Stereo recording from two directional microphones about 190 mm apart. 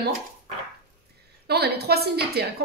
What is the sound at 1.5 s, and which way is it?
A woman's voice, 55° right (ahead or behind).